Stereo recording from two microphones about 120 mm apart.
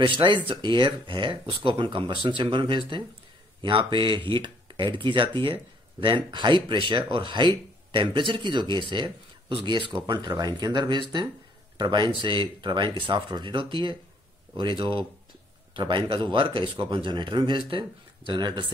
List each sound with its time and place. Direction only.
0.0 s speech: 45° right (ahead or behind)